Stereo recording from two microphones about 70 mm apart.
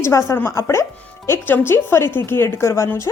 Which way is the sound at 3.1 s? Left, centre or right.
Left.